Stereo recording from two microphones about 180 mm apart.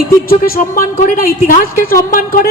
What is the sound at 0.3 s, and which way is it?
A man's voice, 55° left (ahead or behind).